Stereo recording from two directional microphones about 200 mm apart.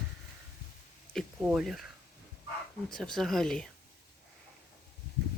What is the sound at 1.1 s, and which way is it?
Speech, centre (ahead or behind).